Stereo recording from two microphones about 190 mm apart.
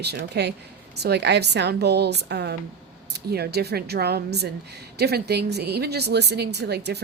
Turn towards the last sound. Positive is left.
turn(degrees=-60)  # may be behind; listen again after turning